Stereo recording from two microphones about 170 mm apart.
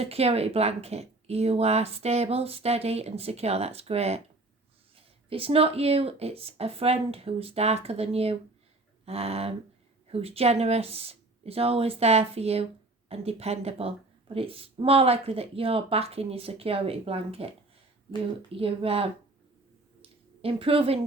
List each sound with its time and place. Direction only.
0.0 s speech: 35° right (ahead or behind)
18.5 s speech: 35° right (ahead or behind)
20.0 s a sound: 35° right (ahead or behind)